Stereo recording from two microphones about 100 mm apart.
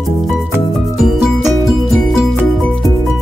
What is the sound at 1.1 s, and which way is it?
Music, centre (ahead or behind).